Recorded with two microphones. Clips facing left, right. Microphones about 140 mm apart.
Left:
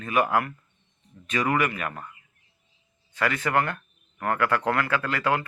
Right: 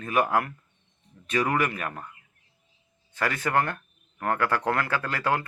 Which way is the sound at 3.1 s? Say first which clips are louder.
Left 1 dB; 40° right (ahead or behind).